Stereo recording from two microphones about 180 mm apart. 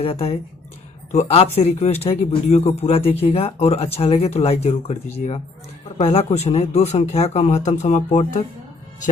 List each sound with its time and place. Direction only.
0.0 s speech: 35° left (ahead or behind)